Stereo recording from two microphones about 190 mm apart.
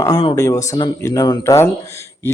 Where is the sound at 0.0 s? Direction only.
25° left (ahead or behind).